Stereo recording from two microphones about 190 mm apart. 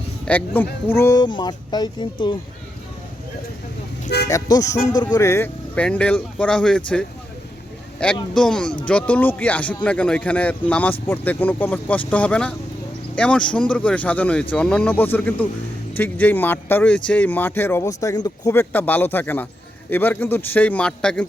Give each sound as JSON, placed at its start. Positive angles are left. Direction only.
{"t": 0.3, "sound": "speech", "side_deg": 10}
{"t": 4.3, "sound": "speech", "side_deg": 15}